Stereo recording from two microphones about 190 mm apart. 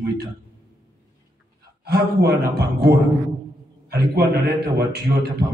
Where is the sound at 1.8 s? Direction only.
55° right (ahead or behind).